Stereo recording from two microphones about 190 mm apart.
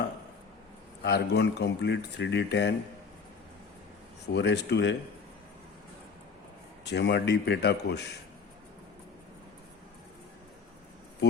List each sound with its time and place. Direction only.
1.0 s speech: 60° left (ahead or behind)
4.4 s speech: 60° left (ahead or behind)
6.8 s speech: 60° left (ahead or behind)